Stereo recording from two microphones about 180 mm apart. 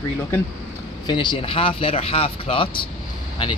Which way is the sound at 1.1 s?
25° left (ahead or behind).